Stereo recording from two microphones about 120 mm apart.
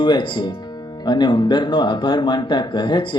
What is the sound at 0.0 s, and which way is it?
Speech, 40° left (ahead or behind).